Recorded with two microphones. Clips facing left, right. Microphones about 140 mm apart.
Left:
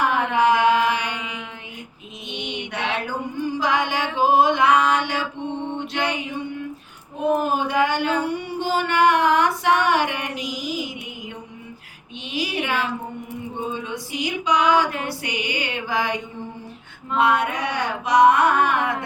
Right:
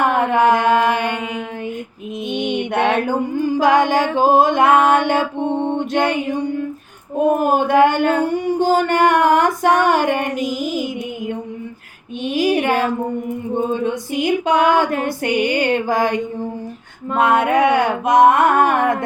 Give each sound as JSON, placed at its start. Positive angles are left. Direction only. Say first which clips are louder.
{"t": 0.0, "sound": "music", "louder": "right 4 dB", "side_deg": -50}
{"t": 2.3, "sound": "mantra", "louder": "right 10 dB", "side_deg": -50}
{"t": 3.6, "sound": "music", "louder": "right 9 dB", "side_deg": -50}
{"t": 7.3, "sound": "a sound", "louder": "right 5 dB", "side_deg": -50}
{"t": 12.2, "sound": "a sound", "louder": "right 10 dB", "side_deg": -50}
{"t": 13.7, "sound": "female singing", "louder": "right 8 dB", "side_deg": -50}